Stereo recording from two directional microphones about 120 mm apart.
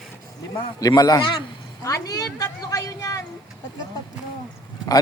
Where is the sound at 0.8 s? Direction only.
30° left (ahead or behind).